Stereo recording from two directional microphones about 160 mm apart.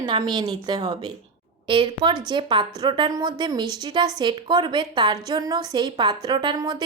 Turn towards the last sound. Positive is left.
turn(degrees=-25)  # may be behind; listen again after turning